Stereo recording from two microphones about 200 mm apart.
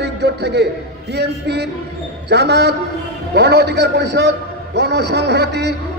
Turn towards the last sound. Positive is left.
turn(degrees=-55)  # may be behind; listen again after turning